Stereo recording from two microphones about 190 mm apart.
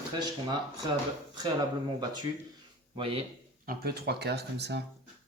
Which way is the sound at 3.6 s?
55° right (ahead or behind).